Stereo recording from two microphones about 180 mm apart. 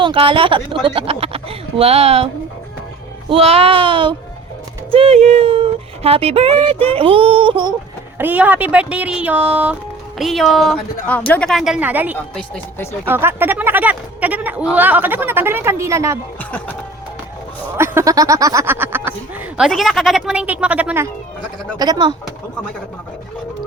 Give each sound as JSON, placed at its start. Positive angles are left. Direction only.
{"t": 0.0, "sound": "a woman's voice", "side_deg": -30}
{"t": 8.2, "sound": "a woman's voice", "side_deg": -10}
{"t": 12.3, "sound": "speech", "side_deg": 5}
{"t": 13.1, "sound": "a woman's voice", "side_deg": -10}
{"t": 16.4, "sound": "speech", "side_deg": 10}
{"t": 17.7, "sound": "a woman's voice", "side_deg": -15}
{"t": 19.5, "sound": "a woman's voice", "side_deg": 0}
{"t": 21.8, "sound": "speech", "side_deg": -25}